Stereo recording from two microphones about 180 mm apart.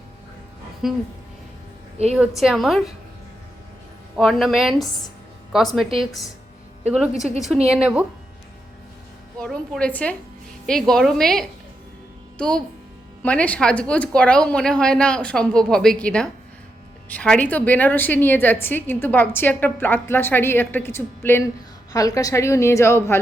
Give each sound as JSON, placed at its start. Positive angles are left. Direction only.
{"t": 0.8, "sound": "speech", "side_deg": 0}
{"t": 2.1, "sound": "speech", "side_deg": -5}
{"t": 4.2, "sound": "speech", "side_deg": 0}
{"t": 6.8, "sound": "speech", "side_deg": -5}
{"t": 9.4, "sound": "a woman's voice", "side_deg": 5}